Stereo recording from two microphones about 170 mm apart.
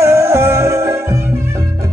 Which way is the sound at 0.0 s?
15° right (ahead or behind).